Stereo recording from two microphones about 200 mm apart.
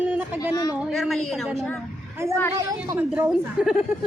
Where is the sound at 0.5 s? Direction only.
20° left (ahead or behind).